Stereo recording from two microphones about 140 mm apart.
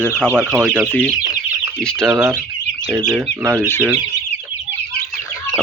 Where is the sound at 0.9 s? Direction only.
10° left (ahead or behind).